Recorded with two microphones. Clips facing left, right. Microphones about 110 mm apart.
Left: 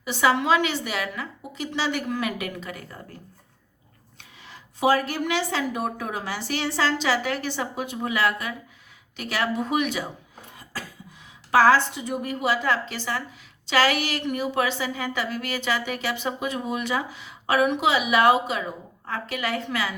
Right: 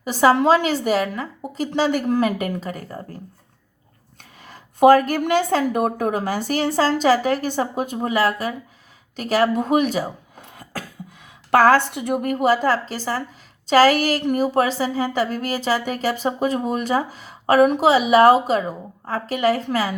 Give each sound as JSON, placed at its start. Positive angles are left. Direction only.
{"t": 0.0, "sound": "a woman's voice", "side_deg": -40}
{"t": 4.2, "sound": "a woman's voice", "side_deg": -45}
{"t": 10.6, "sound": "cough", "side_deg": -50}
{"t": 11.5, "sound": "a woman's voice", "side_deg": -50}